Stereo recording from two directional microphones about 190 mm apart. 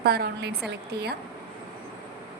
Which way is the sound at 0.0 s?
55° right (ahead or behind).